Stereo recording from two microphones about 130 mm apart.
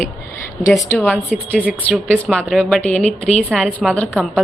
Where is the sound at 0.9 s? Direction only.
15° left (ahead or behind).